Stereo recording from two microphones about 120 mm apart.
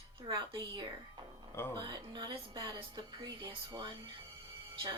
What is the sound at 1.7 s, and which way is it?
A woman's voice, 40° right (ahead or behind).